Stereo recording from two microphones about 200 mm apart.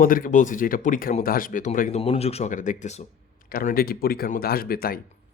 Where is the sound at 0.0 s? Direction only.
45° left (ahead or behind).